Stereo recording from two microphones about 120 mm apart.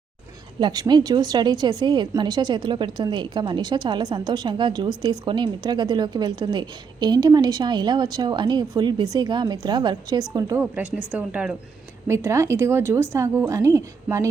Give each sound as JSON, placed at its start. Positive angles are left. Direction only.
{"t": 0.6, "sound": "a woman's voice", "side_deg": -35}
{"t": 10.6, "sound": "speech", "side_deg": -10}
{"t": 12.0, "sound": "speech", "side_deg": -25}